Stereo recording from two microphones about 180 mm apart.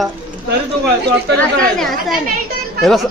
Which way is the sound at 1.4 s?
Centre (ahead or behind).